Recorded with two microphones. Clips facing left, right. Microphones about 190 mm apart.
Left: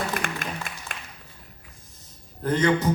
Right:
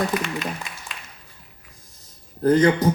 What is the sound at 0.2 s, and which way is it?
Applause, 50° left (ahead or behind).